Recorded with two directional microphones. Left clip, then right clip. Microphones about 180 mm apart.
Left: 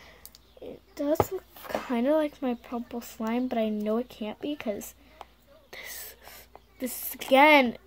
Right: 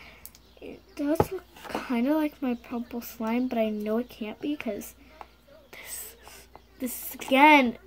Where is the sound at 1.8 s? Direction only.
45° left (ahead or behind).